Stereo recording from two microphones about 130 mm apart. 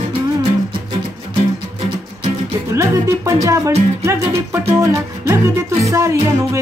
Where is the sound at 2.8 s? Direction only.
25° right (ahead or behind).